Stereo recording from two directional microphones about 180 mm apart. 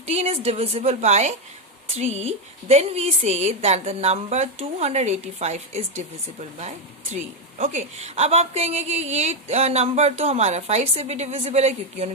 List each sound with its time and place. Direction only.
0.0 s a woman's voice: 35° right (ahead or behind)